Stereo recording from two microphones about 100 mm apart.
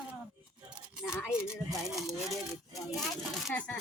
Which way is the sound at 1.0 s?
10° left (ahead or behind).